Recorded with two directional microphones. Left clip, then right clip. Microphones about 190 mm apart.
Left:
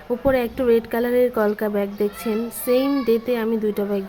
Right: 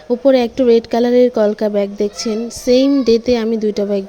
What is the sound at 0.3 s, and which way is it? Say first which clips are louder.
A woman's voice: right 7 dB; 35° right (ahead or behind).